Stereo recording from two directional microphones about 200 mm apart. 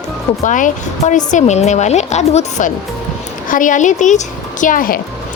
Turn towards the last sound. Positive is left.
turn(degrees=45)  # may be behind; listen again after turning